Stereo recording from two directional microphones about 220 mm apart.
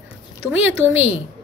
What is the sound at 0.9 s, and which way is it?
Speech, 30° left (ahead or behind).